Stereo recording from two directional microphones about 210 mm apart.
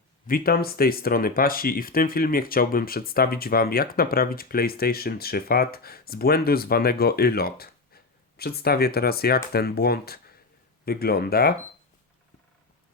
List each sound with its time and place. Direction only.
0.3 s speech: 45° left (ahead or behind)